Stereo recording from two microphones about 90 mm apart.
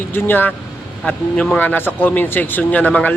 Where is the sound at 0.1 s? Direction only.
20° left (ahead or behind).